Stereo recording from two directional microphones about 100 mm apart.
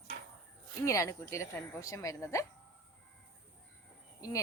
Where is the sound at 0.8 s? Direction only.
30° left (ahead or behind).